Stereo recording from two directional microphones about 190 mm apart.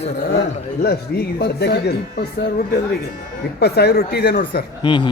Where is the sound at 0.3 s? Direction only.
60° left (ahead or behind).